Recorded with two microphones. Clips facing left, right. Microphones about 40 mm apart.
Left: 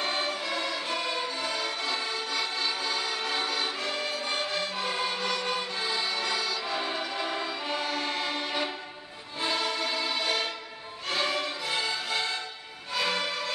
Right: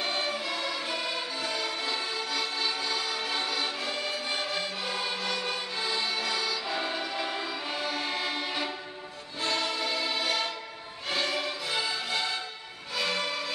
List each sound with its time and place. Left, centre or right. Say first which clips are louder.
0.0 s music: left 1 dB; centre